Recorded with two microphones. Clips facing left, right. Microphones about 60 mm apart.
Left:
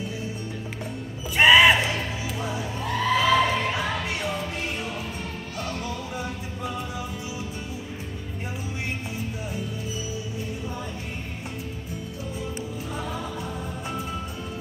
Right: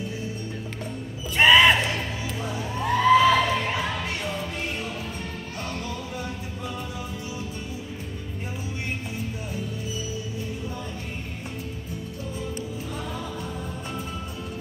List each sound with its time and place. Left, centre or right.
1.3 s music: centre
2.8 s a sound: centre
3.4 s music: centre